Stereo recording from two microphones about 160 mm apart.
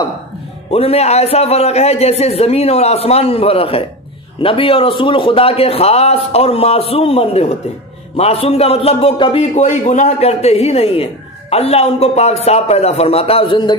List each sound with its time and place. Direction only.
0.7 s a man's voice: 40° left (ahead or behind)